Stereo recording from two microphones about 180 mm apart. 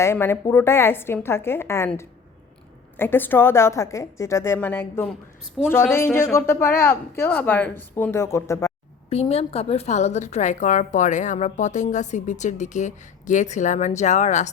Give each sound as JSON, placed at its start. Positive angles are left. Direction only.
{"t": 0.0, "sound": "speech", "side_deg": 15}
{"t": 9.0, "sound": "a woman's voice", "side_deg": 35}